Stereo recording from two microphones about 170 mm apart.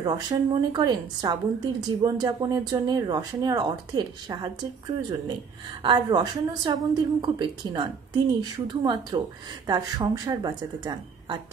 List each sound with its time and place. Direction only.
0.0 s a woman's voice: 25° right (ahead or behind)
5.8 s a woman's voice: 25° right (ahead or behind)